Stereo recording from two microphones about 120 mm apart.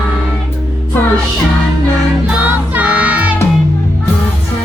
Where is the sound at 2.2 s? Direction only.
10° right (ahead or behind).